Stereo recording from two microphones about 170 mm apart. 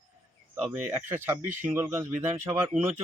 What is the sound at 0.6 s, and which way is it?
Speech, 10° right (ahead or behind).